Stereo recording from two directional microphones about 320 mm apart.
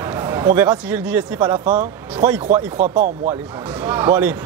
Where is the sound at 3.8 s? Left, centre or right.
Centre.